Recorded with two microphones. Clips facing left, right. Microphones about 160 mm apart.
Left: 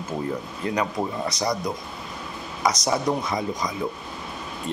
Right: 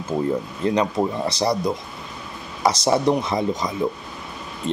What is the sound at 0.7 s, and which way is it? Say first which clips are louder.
Speech: right 3 dB; 25° right (ahead or behind).